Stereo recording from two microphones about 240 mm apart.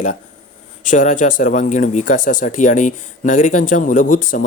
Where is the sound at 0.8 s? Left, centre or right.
Left.